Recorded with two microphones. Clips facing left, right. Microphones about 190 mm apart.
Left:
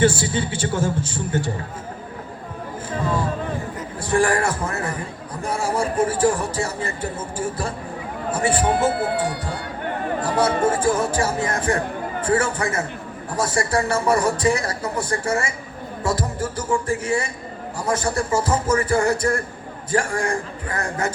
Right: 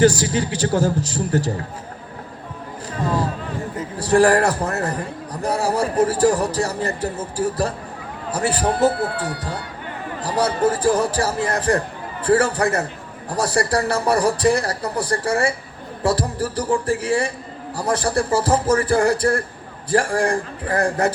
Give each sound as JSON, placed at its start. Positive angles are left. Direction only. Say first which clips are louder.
{"t": 0.0, "sound": "a man's voice", "louder": "right 3 dB", "side_deg": -40}
{"t": 3.9, "sound": "a man's voice", "louder": "right 5 dB", "side_deg": -35}
{"t": 10.2, "sound": "a man's voice", "louder": "right 1 dB", "side_deg": -40}